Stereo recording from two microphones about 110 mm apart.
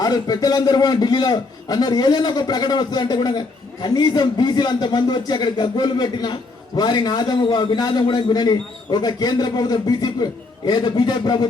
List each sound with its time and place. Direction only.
0.0 s a man's voice: 35° left (ahead or behind)